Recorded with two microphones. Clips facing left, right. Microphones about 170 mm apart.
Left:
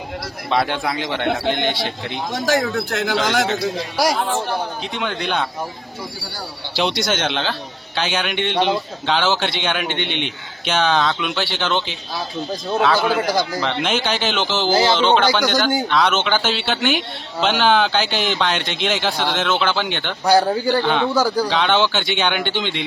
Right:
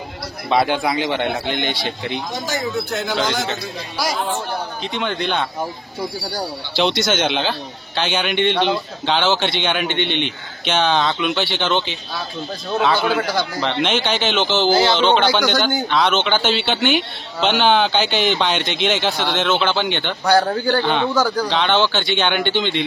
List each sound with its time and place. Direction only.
0.5 s speech: 5° right (ahead or behind)
2.4 s a man's voice: 70° left (ahead or behind)
3.3 s a man's voice: 90° left
4.9 s speech: centre (ahead or behind)
6.8 s speech: 5° right (ahead or behind)
13.1 s a man's voice: 40° left (ahead or behind)
13.6 s speech: 5° left (ahead or behind)